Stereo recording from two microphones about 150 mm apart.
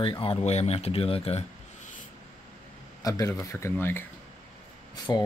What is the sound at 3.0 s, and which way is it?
Speech, 20° left (ahead or behind).